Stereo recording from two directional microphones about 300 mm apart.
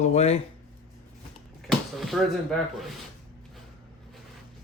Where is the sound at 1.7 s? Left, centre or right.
Centre.